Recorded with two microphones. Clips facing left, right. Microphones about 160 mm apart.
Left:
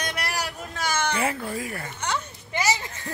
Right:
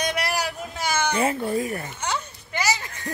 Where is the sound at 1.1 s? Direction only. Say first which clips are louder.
Right 4 dB; 25° right (ahead or behind).